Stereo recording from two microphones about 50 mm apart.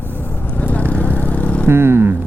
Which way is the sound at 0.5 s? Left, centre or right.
Left.